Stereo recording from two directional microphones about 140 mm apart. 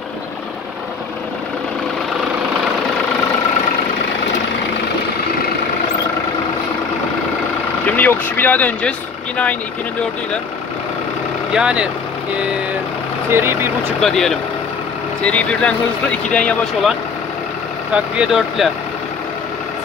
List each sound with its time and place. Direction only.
7.9 s speech: 15° left (ahead or behind)
11.5 s speech: 5° right (ahead or behind)
13.3 s speech: 15° right (ahead or behind)
14.0 s speech: 5° left (ahead or behind)
17.9 s speech: 10° right (ahead or behind)